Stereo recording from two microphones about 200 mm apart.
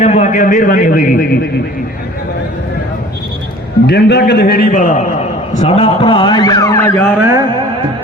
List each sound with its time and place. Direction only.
0.0 s a man's voice: 35° left (ahead or behind)
3.8 s a man's voice: 55° left (ahead or behind)
5.5 s a man's voice: 30° left (ahead or behind); by 7.1 s 10° left (ahead or behind)